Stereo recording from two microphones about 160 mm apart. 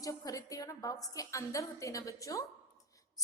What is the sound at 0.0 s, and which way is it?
A woman's voice, 20° left (ahead or behind).